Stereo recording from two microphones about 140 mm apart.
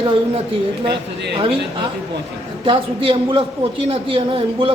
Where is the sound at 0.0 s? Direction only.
35° right (ahead or behind).